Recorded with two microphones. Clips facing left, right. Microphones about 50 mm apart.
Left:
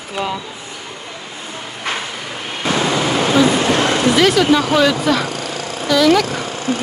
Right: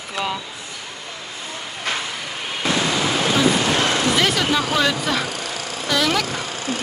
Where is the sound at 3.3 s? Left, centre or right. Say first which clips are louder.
Left 5 dB; left.